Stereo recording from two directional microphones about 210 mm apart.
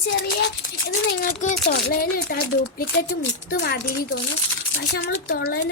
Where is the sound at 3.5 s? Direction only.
50° left (ahead or behind).